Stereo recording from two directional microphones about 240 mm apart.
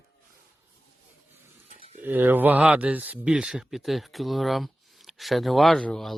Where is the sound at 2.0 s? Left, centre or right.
Centre.